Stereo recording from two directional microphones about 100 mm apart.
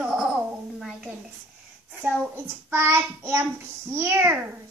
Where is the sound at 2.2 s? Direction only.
25° right (ahead or behind).